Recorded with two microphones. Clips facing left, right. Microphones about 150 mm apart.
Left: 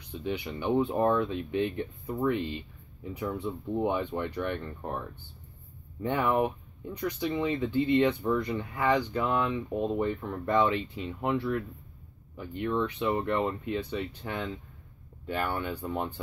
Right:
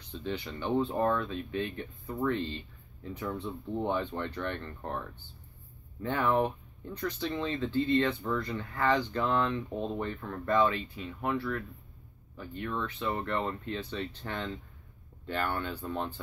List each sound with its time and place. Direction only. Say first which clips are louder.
0.1 s speech: left 3 dB; 10° left (ahead or behind)
6.0 s speech: left 1 dB; 15° left (ahead or behind)